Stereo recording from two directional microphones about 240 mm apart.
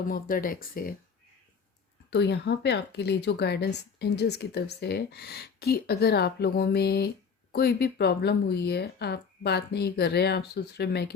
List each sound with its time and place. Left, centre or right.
0.1 s speech: left
2.0 s speech: left